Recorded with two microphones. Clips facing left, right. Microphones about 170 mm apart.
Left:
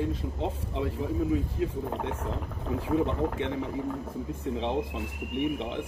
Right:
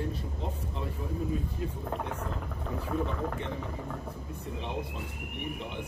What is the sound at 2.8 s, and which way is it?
Speech, 90° left.